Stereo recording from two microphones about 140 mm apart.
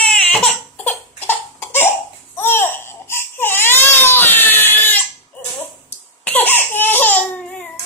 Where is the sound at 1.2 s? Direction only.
15° left (ahead or behind).